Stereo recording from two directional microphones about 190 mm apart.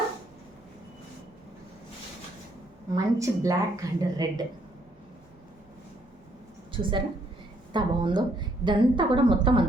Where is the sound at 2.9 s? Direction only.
15° right (ahead or behind).